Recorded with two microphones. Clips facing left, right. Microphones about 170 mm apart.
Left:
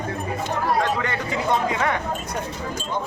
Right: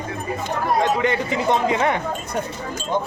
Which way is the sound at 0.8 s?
20° right (ahead or behind).